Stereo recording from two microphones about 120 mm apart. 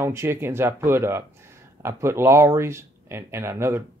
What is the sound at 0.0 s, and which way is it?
Speech, 20° right (ahead or behind).